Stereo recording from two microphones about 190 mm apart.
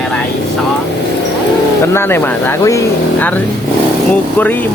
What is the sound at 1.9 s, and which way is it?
Speech, 10° left (ahead or behind).